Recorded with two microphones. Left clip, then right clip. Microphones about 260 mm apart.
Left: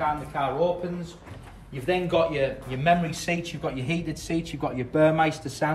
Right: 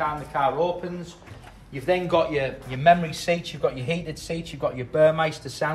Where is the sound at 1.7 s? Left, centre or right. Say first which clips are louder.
Right 3 dB; right.